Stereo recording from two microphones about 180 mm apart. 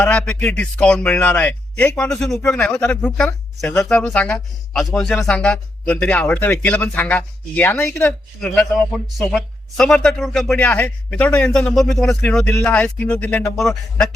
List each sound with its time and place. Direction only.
0.0 s a man's voice: 5° left (ahead or behind)